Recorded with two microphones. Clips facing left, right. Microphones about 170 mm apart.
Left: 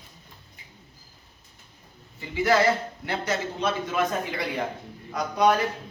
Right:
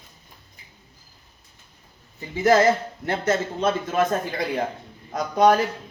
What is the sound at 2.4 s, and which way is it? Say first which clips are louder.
A man's voice: right 4 dB; 45° right (ahead or behind).